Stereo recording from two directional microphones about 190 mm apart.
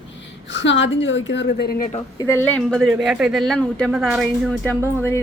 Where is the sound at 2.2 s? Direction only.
10° left (ahead or behind).